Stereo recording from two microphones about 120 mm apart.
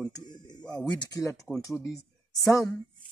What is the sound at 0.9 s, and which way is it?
Speech, 30° left (ahead or behind).